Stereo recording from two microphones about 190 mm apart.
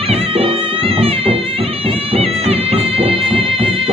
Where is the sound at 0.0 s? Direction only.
30° right (ahead or behind).